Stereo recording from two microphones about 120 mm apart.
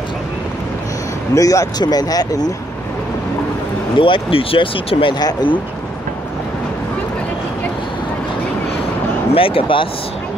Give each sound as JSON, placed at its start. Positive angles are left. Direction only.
{"t": 1.3, "sound": "speech", "side_deg": 30}
{"t": 4.0, "sound": "speech", "side_deg": 50}
{"t": 9.3, "sound": "speech", "side_deg": 50}